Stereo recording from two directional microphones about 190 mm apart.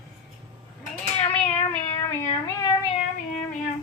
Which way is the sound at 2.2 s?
20° left (ahead or behind).